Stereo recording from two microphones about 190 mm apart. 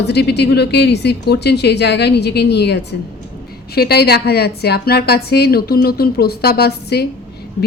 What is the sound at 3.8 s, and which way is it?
A woman's voice, 55° left (ahead or behind).